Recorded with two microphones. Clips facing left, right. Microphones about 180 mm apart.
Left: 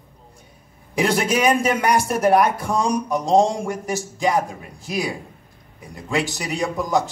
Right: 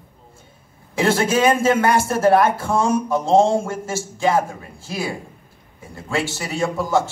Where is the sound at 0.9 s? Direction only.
15° left (ahead or behind).